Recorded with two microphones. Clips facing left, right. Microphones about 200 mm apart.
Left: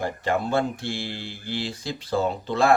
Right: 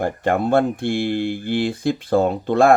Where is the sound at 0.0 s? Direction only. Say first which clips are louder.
Right 6 dB; 55° right (ahead or behind).